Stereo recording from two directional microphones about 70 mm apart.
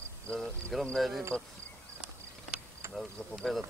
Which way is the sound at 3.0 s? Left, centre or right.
Centre.